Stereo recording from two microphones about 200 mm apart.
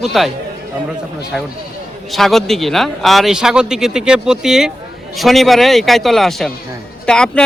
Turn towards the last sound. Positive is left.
turn(degrees=5)  # may be behind; listen again after turning